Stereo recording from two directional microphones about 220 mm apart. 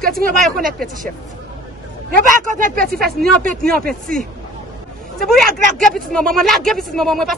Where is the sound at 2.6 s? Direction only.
40° right (ahead or behind).